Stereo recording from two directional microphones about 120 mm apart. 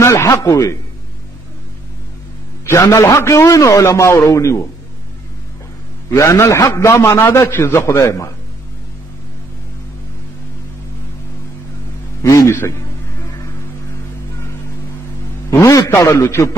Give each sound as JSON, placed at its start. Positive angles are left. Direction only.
{"t": 0.0, "sound": "a man's voice", "side_deg": 20}
{"t": 2.6, "sound": "a man's voice", "side_deg": 25}
{"t": 6.0, "sound": "a man's voice", "side_deg": 25}
{"t": 12.2, "sound": "a man's voice", "side_deg": 25}
{"t": 15.5, "sound": "a man's voice", "side_deg": 25}